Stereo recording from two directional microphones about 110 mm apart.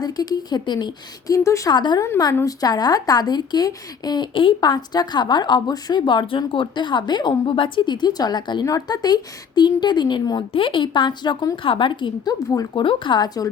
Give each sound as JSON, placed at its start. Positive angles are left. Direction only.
{"t": 0.0, "sound": "a woman's voice", "side_deg": 35}
{"t": 1.5, "sound": "speech", "side_deg": 30}
{"t": 1.7, "sound": "a woman's voice", "side_deg": 40}
{"t": 2.0, "sound": "a woman's voice", "side_deg": 30}
{"t": 12.7, "sound": "speech", "side_deg": 50}